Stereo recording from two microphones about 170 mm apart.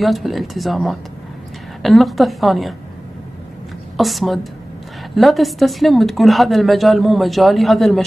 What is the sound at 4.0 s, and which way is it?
Speech, centre (ahead or behind).